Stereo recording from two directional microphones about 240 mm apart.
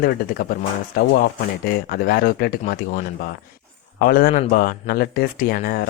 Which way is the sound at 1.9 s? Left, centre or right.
Left.